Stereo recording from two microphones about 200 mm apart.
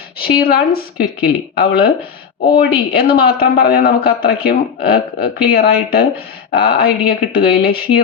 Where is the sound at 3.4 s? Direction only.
50° left (ahead or behind).